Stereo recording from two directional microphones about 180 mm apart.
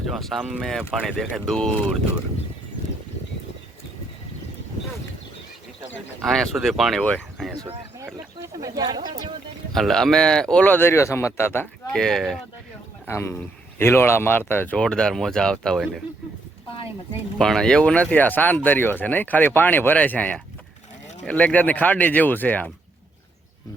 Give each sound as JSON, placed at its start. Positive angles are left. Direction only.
{"t": 0.1, "sound": "speech", "side_deg": 0}
{"t": 6.2, "sound": "speech", "side_deg": 0}
{"t": 7.9, "sound": "speech", "side_deg": -20}
{"t": 9.7, "sound": "speech", "side_deg": 0}
{"t": 13.1, "sound": "speech", "side_deg": 15}
{"t": 17.3, "sound": "speech", "side_deg": 0}